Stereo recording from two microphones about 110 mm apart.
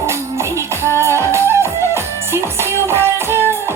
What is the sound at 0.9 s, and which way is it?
Music, 25° right (ahead or behind).